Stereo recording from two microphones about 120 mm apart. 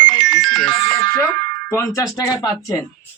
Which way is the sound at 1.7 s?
25° left (ahead or behind).